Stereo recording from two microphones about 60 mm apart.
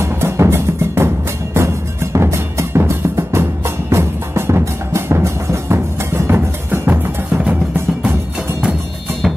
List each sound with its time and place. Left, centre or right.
0.0 s music: right
6.3 s music: right